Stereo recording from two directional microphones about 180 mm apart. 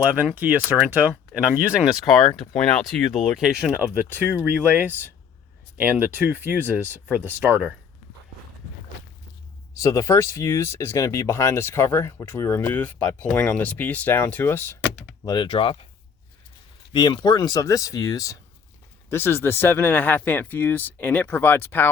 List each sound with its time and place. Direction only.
0.0 s speech: 5° right (ahead or behind)
9.7 s speech: 20° left (ahead or behind)
15.2 s speech: 25° left (ahead or behind)
16.9 s speech: 25° left (ahead or behind)